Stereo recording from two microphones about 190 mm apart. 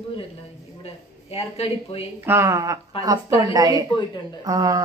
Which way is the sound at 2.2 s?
15° right (ahead or behind).